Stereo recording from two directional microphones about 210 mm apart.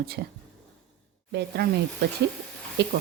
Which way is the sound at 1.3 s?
55° right (ahead or behind).